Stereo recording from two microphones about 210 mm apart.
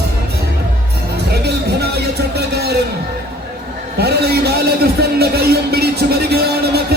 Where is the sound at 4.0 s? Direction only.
50° right (ahead or behind).